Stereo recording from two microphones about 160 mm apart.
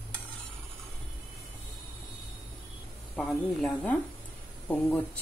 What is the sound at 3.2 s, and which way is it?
A woman's voice, 5° left (ahead or behind).